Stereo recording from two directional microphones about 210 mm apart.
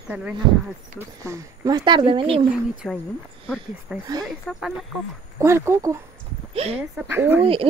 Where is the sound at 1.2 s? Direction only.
15° right (ahead or behind).